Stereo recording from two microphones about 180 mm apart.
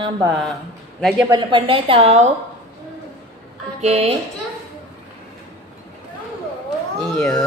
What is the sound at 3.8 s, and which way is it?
Speech, 35° right (ahead or behind).